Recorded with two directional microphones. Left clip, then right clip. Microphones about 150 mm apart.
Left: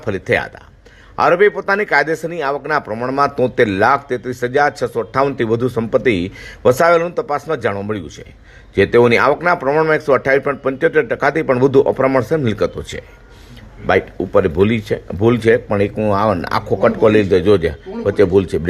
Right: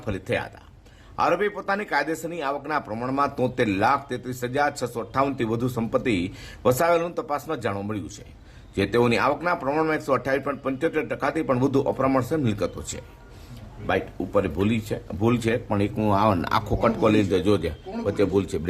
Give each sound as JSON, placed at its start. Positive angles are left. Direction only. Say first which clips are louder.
{"t": 0.0, "sound": "speech", "louder": "left 10 dB", "side_deg": 20}
{"t": 13.8, "sound": "speech", "louder": "left 10 dB", "side_deg": 25}
{"t": 15.7, "sound": "speech", "louder": "left 7 dB", "side_deg": 5}